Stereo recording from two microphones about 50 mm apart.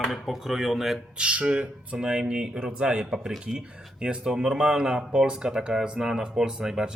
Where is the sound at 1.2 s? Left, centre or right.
Right.